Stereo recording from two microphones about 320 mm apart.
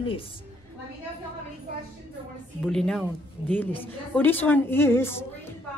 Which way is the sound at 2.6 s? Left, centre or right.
Centre.